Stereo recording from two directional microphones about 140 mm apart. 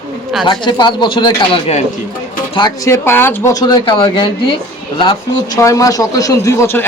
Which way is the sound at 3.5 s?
30° left (ahead or behind).